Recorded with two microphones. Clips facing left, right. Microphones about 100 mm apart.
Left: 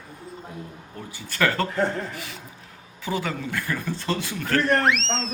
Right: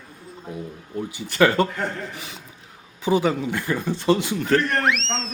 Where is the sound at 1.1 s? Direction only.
15° right (ahead or behind).